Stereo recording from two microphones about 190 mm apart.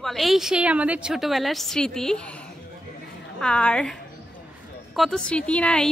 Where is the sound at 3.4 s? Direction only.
5° left (ahead or behind).